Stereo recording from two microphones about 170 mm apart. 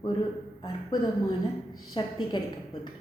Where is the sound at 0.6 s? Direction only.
25° left (ahead or behind).